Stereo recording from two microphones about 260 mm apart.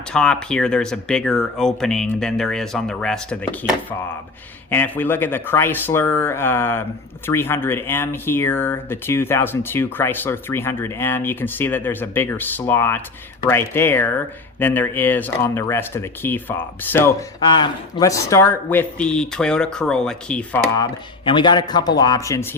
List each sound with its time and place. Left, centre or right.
0.1 s speech: centre
21.2 s speech: centre